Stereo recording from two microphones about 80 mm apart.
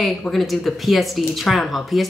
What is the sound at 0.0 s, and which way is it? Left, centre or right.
Speech, centre.